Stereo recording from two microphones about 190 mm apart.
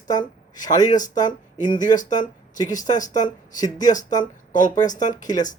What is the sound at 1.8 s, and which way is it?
Speech, 40° left (ahead or behind).